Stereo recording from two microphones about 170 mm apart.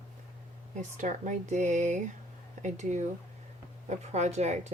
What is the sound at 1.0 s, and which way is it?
Speech, 45° right (ahead or behind).